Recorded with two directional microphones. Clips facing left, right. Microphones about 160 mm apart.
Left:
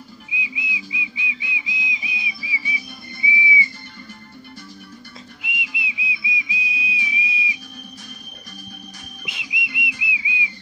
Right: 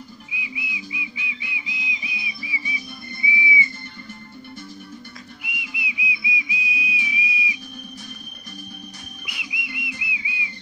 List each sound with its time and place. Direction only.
0.3 s whistle: 20° left (ahead or behind)
3.3 s music: 20° left (ahead or behind)
5.4 s whistle: 20° left (ahead or behind)
9.2 s whistle: 20° left (ahead or behind)